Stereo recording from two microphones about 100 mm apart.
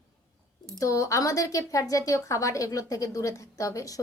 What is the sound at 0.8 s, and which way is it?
Speech, 30° left (ahead or behind).